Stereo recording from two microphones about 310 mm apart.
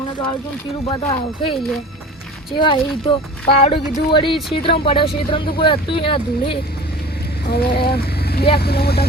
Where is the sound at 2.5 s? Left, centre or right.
Centre.